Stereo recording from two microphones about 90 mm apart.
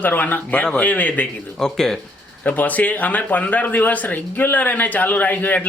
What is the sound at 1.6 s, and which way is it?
Speech, 5° left (ahead or behind).